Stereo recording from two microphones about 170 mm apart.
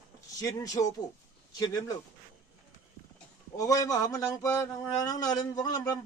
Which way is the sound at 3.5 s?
20° left (ahead or behind).